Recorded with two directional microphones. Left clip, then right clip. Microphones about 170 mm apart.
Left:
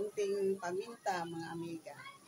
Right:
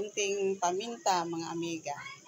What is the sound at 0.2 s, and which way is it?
Speech, 15° right (ahead or behind).